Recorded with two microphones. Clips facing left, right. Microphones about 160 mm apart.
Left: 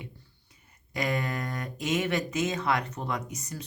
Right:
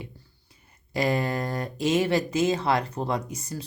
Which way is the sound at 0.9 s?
30° right (ahead or behind).